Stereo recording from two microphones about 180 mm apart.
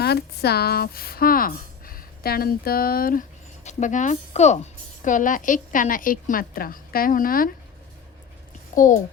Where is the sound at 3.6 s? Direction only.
45° left (ahead or behind).